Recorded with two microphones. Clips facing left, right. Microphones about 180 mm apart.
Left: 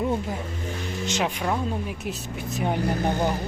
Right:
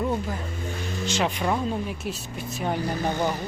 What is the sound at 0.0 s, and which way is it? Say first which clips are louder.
Speech: left 1 dB; 15° left (ahead or behind).